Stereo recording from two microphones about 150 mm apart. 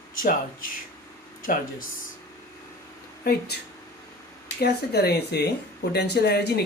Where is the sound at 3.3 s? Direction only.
90° left.